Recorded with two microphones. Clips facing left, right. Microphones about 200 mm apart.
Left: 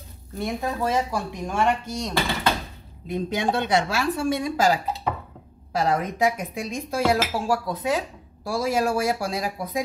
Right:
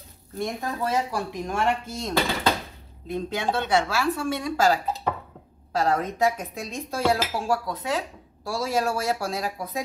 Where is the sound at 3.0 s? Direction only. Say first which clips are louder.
Left 2 dB; 15° left (ahead or behind).